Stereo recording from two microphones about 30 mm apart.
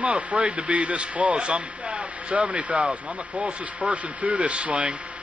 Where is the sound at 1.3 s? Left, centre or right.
Right.